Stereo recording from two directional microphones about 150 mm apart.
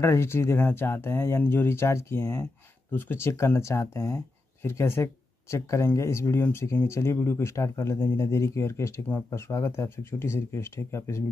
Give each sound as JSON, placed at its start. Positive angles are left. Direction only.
{"t": 0.0, "sound": "speech", "side_deg": 20}